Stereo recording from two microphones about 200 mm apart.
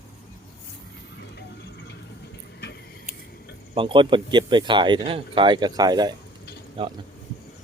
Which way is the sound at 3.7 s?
25° right (ahead or behind).